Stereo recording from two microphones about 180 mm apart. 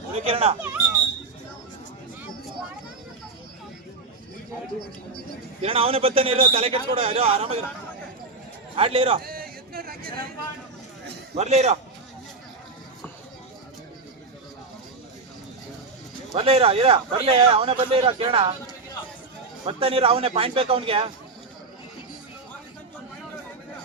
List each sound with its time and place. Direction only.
0.1 s speech: 35° right (ahead or behind)
5.6 s speech: 30° right (ahead or behind)
8.7 s speech: 30° right (ahead or behind)
9.2 s a sound: 55° right (ahead or behind)
11.3 s speech: 40° right (ahead or behind)
16.3 s speech: 35° right (ahead or behind)
19.6 s speech: 30° right (ahead or behind)